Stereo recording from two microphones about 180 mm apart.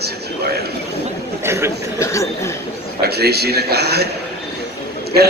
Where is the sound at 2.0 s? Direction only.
15° left (ahead or behind).